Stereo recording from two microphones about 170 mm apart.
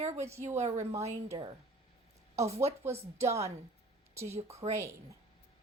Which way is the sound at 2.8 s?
15° right (ahead or behind).